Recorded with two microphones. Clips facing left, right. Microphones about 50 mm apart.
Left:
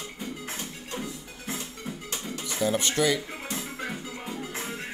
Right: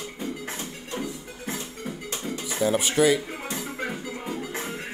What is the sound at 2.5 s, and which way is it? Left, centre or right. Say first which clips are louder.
Music: right 2 dB; centre.